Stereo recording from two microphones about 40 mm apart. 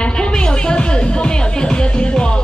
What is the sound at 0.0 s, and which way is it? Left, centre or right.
Music, left.